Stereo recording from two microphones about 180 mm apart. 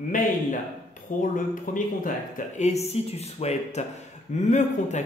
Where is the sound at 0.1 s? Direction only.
45° left (ahead or behind).